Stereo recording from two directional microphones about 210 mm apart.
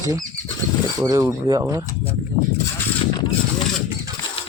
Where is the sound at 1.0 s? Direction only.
15° right (ahead or behind).